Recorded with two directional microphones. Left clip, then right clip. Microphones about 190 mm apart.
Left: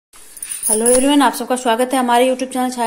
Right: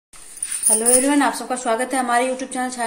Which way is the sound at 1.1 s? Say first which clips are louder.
Left 5 dB; 40° left (ahead or behind).